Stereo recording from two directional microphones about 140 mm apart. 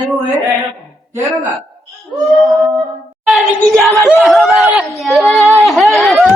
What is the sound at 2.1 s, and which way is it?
Child singing, centre (ahead or behind).